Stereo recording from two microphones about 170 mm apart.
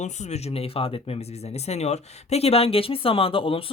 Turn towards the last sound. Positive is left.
turn(degrees=30)  # may be behind; listen again after turning